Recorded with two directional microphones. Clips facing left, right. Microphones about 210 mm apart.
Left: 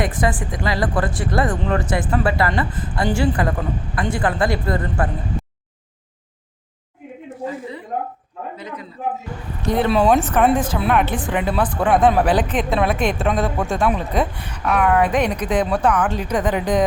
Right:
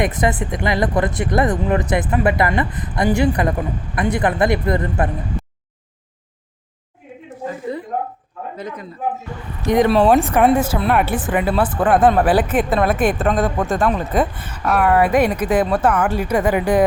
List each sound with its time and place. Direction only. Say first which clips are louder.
0.0 s speech: right 2 dB; 20° right (ahead or behind)
8.5 s a man's voice: right 3 dB; 45° right (ahead or behind)
9.9 s a woman's voice: even; centre (ahead or behind)
10.2 s a woman's voice: right 2 dB; 10° right (ahead or behind)